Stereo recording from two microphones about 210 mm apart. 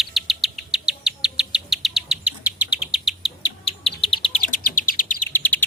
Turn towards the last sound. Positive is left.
turn(degrees=10)  # may be behind; listen again after turning